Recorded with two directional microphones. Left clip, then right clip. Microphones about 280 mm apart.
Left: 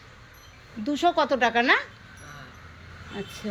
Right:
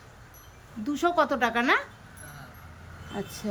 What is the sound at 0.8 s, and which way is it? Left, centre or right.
Speech, centre.